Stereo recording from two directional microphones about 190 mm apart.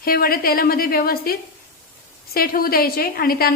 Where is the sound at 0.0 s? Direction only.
50° left (ahead or behind).